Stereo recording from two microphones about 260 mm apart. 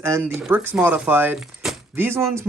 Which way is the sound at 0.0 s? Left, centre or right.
Centre.